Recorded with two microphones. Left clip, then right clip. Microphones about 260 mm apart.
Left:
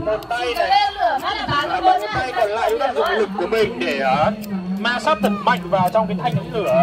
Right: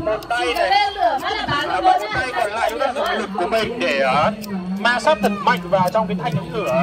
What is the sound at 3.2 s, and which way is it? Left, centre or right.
A man's voice, right.